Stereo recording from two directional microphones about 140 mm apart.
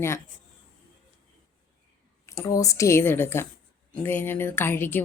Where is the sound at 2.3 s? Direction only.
20° left (ahead or behind).